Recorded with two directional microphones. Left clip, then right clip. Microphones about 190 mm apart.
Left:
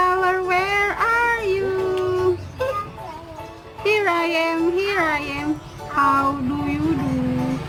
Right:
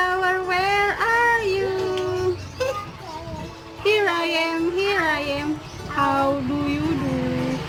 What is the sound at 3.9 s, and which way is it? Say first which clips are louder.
Music: left 1 dB; 55° left (ahead or behind).